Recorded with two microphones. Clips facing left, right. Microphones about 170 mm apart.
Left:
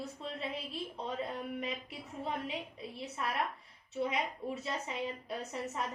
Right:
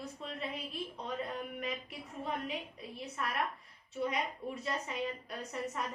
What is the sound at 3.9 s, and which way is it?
A woman's voice, 25° left (ahead or behind).